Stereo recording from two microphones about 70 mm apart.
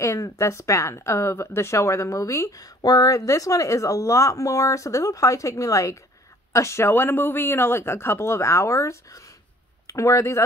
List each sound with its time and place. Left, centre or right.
0.0 s speech: left